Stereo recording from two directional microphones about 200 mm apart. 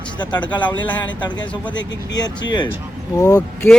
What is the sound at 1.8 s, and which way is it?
Speech, 60° left (ahead or behind).